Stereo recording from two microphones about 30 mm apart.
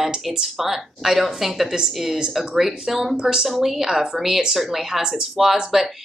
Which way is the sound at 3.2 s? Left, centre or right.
Centre.